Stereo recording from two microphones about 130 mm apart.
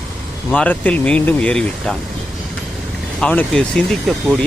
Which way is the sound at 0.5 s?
10° left (ahead or behind).